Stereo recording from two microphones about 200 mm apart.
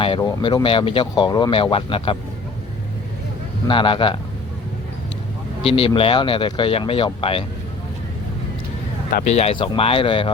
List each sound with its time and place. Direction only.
0.0 s speech: 20° left (ahead or behind)
3.7 s speech: 25° left (ahead or behind)
5.6 s speech: 30° left (ahead or behind)
9.3 s speech: 30° left (ahead or behind)